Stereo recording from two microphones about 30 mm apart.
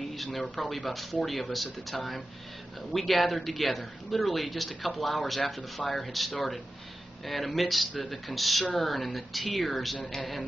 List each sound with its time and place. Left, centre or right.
0.3 s speech: left
1.5 s speech: centre